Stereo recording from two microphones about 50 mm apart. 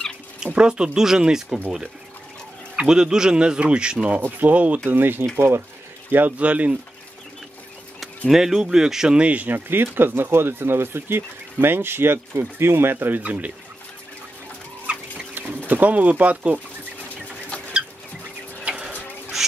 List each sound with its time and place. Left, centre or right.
0.5 s speech: centre
2.7 s speech: centre
4.4 s speech: right
4.8 s speech: right
6.1 s speech: right
8.3 s speech: centre
9.2 s speech: right
9.7 s speech: right
12.9 s speech: right
14.9 s chicken: right
15.3 s speech: right
18.6 s a sound: right